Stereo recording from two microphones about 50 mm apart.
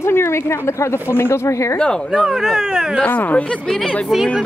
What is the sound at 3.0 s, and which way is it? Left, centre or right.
Speech, left.